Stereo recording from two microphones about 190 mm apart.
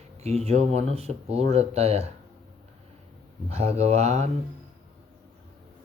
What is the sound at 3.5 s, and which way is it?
Speech, 35° right (ahead or behind).